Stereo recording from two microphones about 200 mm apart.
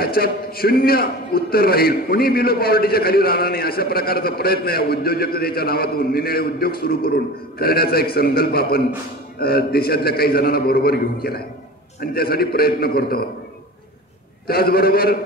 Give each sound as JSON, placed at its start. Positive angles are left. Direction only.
{"t": 0.0, "sound": "a man's voice", "side_deg": 50}
{"t": 14.5, "sound": "a man's voice", "side_deg": 50}